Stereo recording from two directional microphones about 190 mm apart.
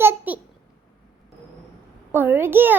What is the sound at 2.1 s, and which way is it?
Speech, 10° right (ahead or behind).